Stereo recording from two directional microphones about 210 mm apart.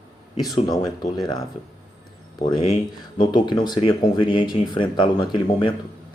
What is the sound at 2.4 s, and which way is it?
Speech, 20° left (ahead or behind).